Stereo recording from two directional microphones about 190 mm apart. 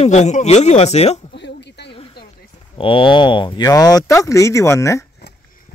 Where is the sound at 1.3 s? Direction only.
65° left (ahead or behind).